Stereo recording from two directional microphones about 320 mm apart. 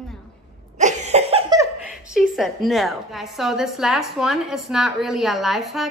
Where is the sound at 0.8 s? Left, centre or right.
Right.